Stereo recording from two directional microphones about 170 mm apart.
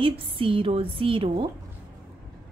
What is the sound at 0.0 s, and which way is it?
A woman's voice, 30° right (ahead or behind).